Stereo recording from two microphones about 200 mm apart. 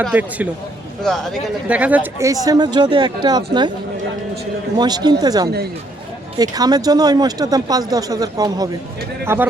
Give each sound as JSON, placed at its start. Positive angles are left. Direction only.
{"t": 0.1, "sound": "speech", "side_deg": -10}
{"t": 4.8, "sound": "speech", "side_deg": -20}